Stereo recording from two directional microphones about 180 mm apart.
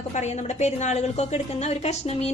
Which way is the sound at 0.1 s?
40° left (ahead or behind).